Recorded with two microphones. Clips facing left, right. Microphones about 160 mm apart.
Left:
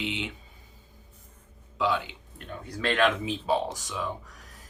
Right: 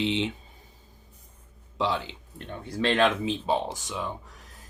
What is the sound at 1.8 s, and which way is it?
Speech, 30° right (ahead or behind).